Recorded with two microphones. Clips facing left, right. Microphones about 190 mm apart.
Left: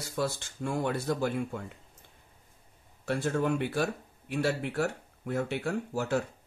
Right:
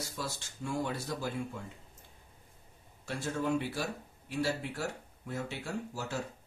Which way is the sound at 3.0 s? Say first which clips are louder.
Left 5 dB; 60° left (ahead or behind).